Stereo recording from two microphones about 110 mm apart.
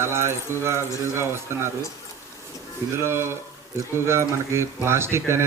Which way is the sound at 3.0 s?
25° right (ahead or behind).